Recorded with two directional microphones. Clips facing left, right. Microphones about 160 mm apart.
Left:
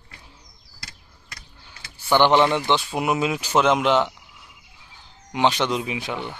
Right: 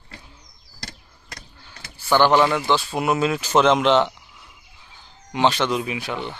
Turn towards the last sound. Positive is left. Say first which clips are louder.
# right 1 dB
turn(degrees=15)  # may be behind; listen again after turning